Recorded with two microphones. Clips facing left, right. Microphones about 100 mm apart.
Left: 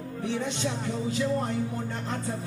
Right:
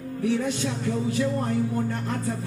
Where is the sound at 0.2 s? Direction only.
25° left (ahead or behind).